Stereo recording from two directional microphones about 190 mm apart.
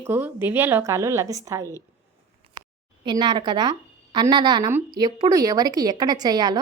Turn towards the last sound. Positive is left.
turn(degrees=-20)  # may be behind; listen again after turning